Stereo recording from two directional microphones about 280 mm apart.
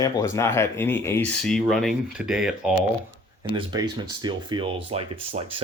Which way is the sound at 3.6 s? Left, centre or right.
Centre.